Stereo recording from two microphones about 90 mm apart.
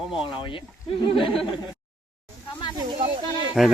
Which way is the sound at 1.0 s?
80° left.